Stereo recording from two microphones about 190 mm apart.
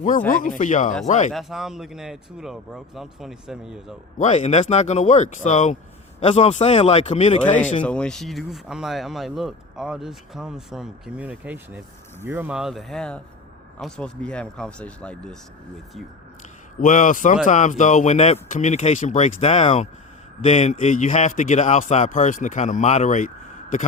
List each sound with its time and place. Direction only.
0.3 s a man's voice: 45° left (ahead or behind)
1.3 s speech: centre (ahead or behind)
4.2 s a man's voice: 40° left (ahead or behind)
7.9 s speech: 5° left (ahead or behind)
16.8 s a man's voice: 45° left (ahead or behind)